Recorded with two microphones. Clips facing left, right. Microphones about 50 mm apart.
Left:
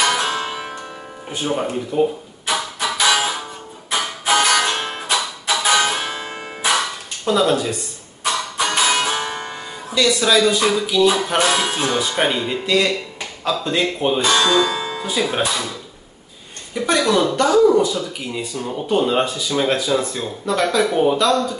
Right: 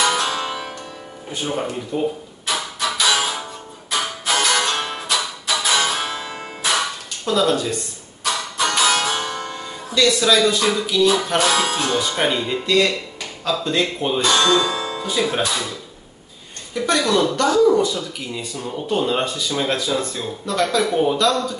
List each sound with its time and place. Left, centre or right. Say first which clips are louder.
0.0 s music: left 1 dB; left
1.3 s speech: left 3 dB; centre
3.0 s music: left 2 dB; centre
4.3 s music: left 3 dB; left
7.2 s speech: left 2 dB; centre
8.2 s music: left 1 dB; left
9.9 s speech: even; centre
15.0 s speech: even; centre
16.7 s speech: left 1 dB; centre